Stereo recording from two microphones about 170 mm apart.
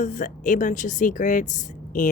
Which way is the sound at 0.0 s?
50° left (ahead or behind).